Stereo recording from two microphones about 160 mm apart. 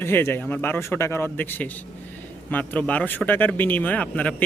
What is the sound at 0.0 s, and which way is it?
Speech, 15° left (ahead or behind).